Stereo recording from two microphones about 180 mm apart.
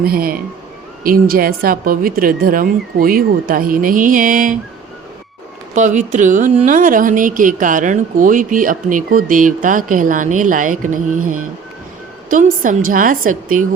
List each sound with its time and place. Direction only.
0.0 s speech: 55° right (ahead or behind)
5.7 s speech: 40° right (ahead or behind)